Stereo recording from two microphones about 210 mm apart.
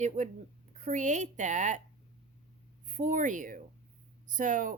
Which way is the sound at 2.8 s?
35° right (ahead or behind).